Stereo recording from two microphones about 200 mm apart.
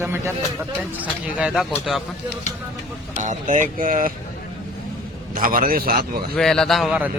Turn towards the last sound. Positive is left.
turn(degrees=-5)  # may be behind; listen again after turning